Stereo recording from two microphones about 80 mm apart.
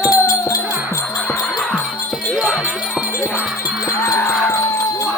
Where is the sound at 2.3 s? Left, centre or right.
Centre.